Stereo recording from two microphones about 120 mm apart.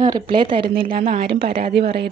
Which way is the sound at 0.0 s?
40° right (ahead or behind).